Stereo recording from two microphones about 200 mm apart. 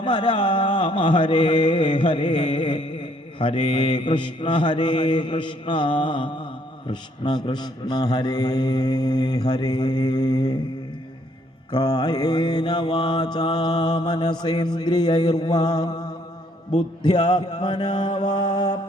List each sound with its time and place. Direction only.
0.0 s mantra: 25° left (ahead or behind)
11.7 s mantra: 25° left (ahead or behind)